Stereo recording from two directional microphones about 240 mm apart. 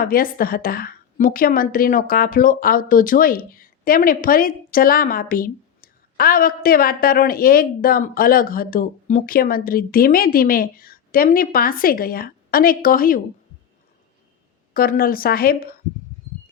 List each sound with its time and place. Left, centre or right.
0.0 s a woman's voice: left
14.7 s a woman's voice: left